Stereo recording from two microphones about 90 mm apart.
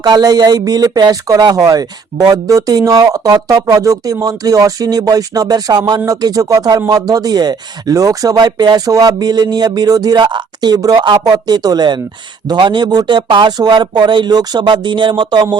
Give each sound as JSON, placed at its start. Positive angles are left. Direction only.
{"t": 0.0, "sound": "speech", "side_deg": -45}